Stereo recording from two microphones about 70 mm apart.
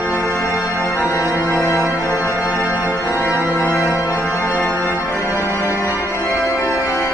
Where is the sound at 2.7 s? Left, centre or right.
Right.